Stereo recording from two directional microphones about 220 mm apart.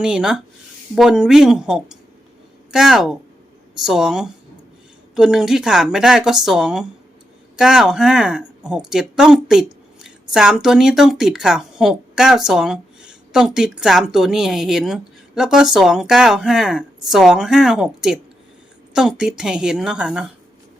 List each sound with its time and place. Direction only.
0.0 s a woman's voice: 5° right (ahead or behind)